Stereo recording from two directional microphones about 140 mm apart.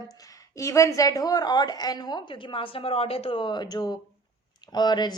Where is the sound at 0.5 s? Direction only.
20° left (ahead or behind).